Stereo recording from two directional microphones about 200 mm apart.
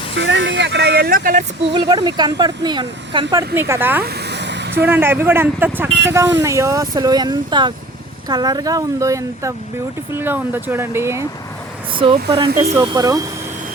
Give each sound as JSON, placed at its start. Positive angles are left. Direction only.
{"t": 0.2, "sound": "speech", "side_deg": -60}
{"t": 1.7, "sound": "speech", "side_deg": -25}
{"t": 3.3, "sound": "speech", "side_deg": -10}
{"t": 4.0, "sound": "a sound", "side_deg": -55}
{"t": 4.7, "sound": "speech", "side_deg": -10}
{"t": 11.9, "sound": "speech", "side_deg": -25}